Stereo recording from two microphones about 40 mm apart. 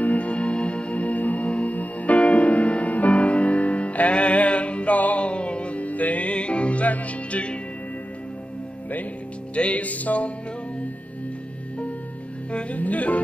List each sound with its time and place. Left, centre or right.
0.0 s music: left
9.6 s music: left
12.7 s music: left